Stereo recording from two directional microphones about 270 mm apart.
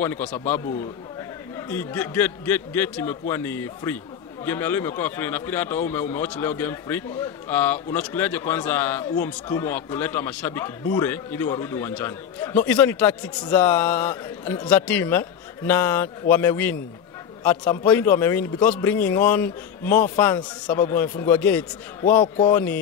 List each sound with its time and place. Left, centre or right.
0.0 s a man's voice: centre
1.7 s a man's voice: centre